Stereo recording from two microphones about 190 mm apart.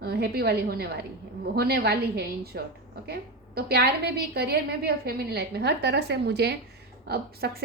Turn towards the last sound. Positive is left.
turn(degrees=-55)  # may be behind; listen again after turning